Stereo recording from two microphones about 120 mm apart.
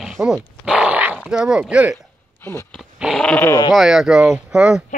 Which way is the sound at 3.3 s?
15° left (ahead or behind).